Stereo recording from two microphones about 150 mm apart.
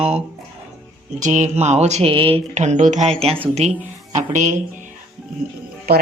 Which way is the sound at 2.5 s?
50° right (ahead or behind).